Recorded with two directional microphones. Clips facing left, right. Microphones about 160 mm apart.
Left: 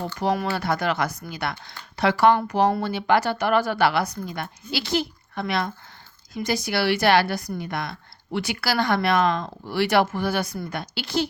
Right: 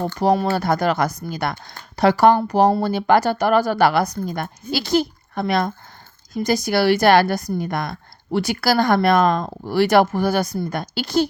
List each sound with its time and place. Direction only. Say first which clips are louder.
0.0 s a woman's voice: right 6 dB; 40° right (ahead or behind)